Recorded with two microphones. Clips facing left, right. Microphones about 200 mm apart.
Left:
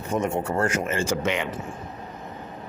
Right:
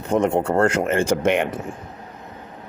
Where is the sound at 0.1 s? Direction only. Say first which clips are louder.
Right 6 dB; 65° right (ahead or behind).